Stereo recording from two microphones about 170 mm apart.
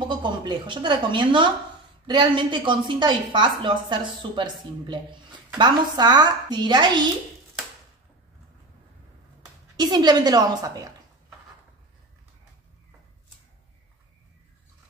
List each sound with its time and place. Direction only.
0.1 s a woman's voice: 25° right (ahead or behind)
9.8 s speech: 25° right (ahead or behind)